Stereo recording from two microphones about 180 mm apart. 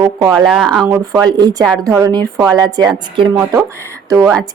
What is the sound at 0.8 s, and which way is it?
A woman's voice, 20° right (ahead or behind).